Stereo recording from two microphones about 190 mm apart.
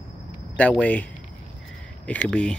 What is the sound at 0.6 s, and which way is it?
Speech, 5° left (ahead or behind).